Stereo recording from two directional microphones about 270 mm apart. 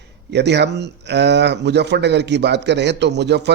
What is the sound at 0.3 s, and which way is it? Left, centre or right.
Speech, right.